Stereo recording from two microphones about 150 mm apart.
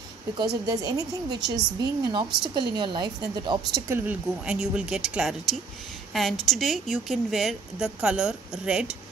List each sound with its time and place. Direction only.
0.4 s a woman's voice: 25° right (ahead or behind)
3.9 s speech: 10° right (ahead or behind)